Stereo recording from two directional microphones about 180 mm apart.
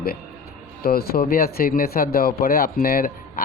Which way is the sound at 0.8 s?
60° left (ahead or behind).